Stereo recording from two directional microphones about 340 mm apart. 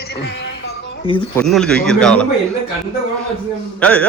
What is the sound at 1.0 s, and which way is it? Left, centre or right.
Speech, centre.